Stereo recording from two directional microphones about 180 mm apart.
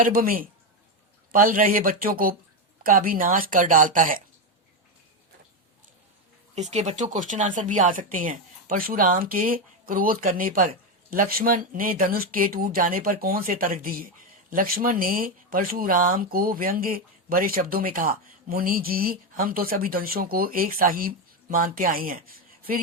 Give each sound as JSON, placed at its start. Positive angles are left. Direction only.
{"t": 0.0, "sound": "speech", "side_deg": -50}
{"t": 6.6, "sound": "speech", "side_deg": -40}